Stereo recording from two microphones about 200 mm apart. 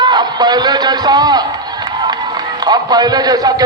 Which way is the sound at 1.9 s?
20° right (ahead or behind).